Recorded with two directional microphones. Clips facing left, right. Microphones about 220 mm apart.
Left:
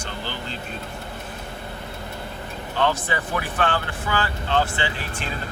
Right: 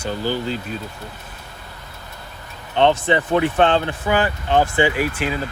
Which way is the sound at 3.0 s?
25° right (ahead or behind).